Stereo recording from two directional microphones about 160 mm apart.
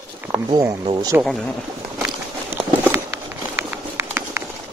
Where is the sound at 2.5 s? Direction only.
15° right (ahead or behind).